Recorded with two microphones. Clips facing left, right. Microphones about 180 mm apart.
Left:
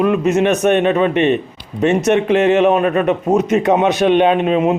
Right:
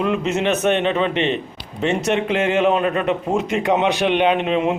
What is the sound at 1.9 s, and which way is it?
A man's voice, 20° left (ahead or behind).